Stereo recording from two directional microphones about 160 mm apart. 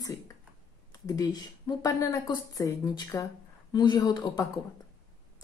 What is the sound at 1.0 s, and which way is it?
Speech, 25° left (ahead or behind).